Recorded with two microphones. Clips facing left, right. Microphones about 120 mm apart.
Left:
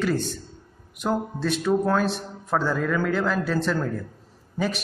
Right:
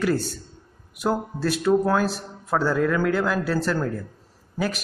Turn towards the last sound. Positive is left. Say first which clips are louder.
# even
turn(degrees=-5)  # may be behind; listen again after turning